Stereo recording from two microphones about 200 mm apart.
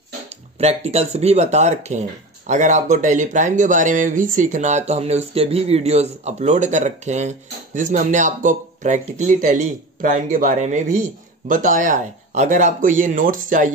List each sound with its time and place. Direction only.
0.6 s speech: 30° right (ahead or behind)